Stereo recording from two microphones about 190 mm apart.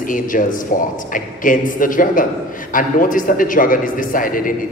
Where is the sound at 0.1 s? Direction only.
45° left (ahead or behind).